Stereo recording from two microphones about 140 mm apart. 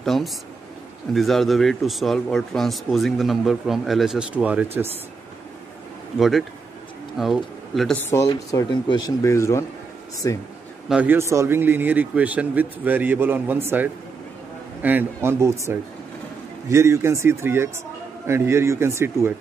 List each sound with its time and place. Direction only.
0.0 s speech: centre (ahead or behind)
6.1 s speech: centre (ahead or behind)
7.9 s speech: 20° left (ahead or behind)
10.9 s a man's voice: 10° right (ahead or behind)